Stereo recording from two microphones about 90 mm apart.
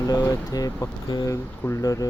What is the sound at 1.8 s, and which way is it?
Speech, 40° left (ahead or behind).